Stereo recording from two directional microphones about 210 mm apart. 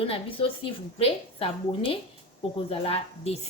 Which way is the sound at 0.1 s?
25° left (ahead or behind).